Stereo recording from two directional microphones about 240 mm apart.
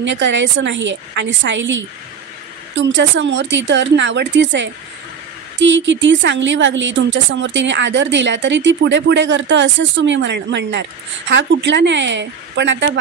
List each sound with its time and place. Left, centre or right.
0.0 s speech: right